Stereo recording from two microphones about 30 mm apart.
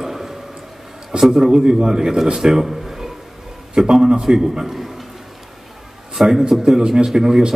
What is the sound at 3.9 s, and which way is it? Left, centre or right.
A man's voice, right.